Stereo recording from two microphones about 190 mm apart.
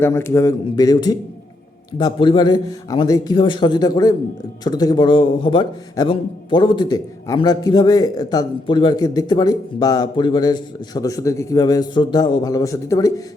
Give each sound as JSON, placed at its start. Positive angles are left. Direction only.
{"t": 0.0, "sound": "a man's voice", "side_deg": 15}